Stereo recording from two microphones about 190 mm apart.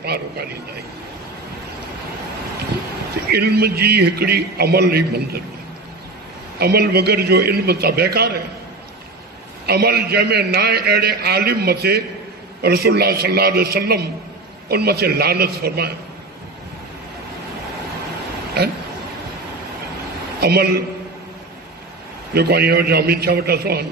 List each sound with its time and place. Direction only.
0.0 s a man's voice: 55° right (ahead or behind)
3.3 s a man's voice: 55° right (ahead or behind)
6.6 s a man's voice: 55° right (ahead or behind)
9.7 s a man's voice: 55° right (ahead or behind)
20.3 s a man's voice: 55° right (ahead or behind)
22.3 s a man's voice: 55° right (ahead or behind)